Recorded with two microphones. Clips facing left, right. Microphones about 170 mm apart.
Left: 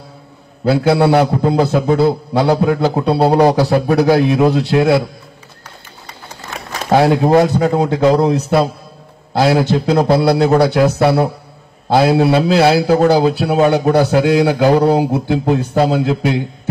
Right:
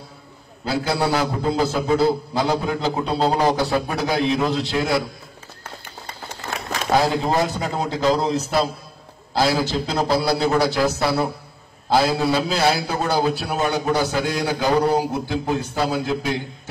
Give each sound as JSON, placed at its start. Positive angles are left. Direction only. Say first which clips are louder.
{"t": 0.7, "sound": "a man's voice", "louder": "left 9 dB", "side_deg": 60}
{"t": 6.9, "sound": "a man's voice", "louder": "left 8 dB", "side_deg": 65}